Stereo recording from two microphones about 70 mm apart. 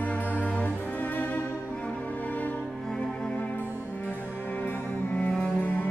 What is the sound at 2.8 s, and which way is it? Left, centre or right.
Music, centre.